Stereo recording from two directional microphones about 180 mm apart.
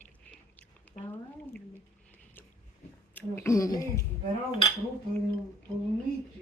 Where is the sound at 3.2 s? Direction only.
15° left (ahead or behind).